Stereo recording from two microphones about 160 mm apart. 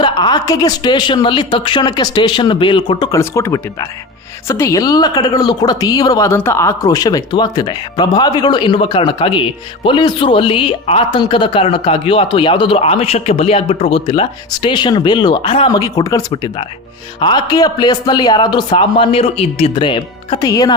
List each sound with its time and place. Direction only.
0.0 s speech: 25° left (ahead or behind)
15.8 s speech: 20° left (ahead or behind)
16.3 s speech: 30° left (ahead or behind)